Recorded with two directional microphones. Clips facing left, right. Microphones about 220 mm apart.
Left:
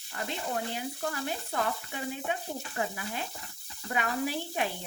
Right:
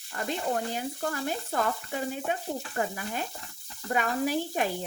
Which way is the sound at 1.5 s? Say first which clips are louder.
Right 3 dB; 45° right (ahead or behind).